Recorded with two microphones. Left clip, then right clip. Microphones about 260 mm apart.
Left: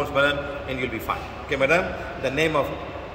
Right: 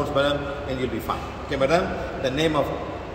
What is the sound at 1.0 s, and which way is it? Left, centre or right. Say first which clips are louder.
A man's voice: even; centre.